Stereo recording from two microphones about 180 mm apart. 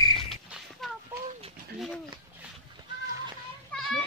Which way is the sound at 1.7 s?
Centre (ahead or behind).